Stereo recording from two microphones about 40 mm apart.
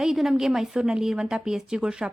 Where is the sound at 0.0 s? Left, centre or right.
Centre.